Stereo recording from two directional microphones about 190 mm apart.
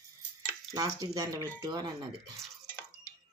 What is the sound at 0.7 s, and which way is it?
Speech, 20° right (ahead or behind).